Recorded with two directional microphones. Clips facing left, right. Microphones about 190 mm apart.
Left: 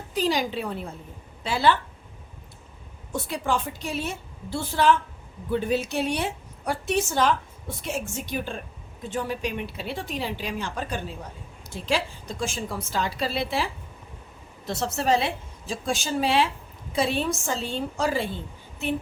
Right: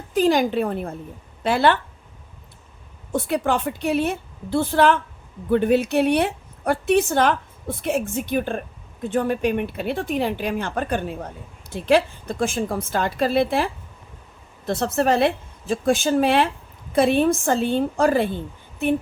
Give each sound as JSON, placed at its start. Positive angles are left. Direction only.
{"t": 0.1, "sound": "a woman's voice", "side_deg": -50}
{"t": 3.1, "sound": "a woman's voice", "side_deg": -60}
{"t": 14.7, "sound": "a woman's voice", "side_deg": -55}